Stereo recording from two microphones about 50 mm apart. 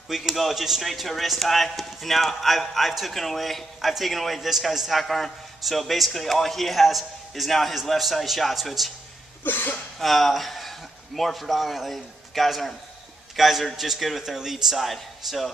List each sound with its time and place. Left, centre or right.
0.1 s a man's voice: centre
9.4 s a sound: left
9.9 s a man's voice: centre